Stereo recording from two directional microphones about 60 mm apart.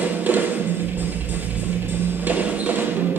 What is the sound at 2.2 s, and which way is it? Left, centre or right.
Music, right.